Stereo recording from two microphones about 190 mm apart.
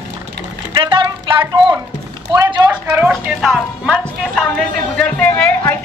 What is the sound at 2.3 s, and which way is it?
Speech, 25° right (ahead or behind).